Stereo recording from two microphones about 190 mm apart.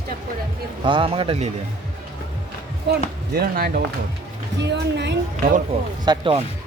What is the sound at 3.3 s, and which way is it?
Speech, 55° right (ahead or behind).